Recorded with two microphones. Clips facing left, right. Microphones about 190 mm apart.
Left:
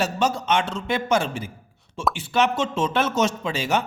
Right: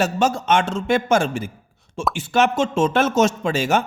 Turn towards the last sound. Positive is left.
turn(degrees=-45)  # may be behind; listen again after turning